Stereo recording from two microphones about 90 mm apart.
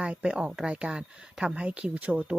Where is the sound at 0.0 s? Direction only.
10° right (ahead or behind).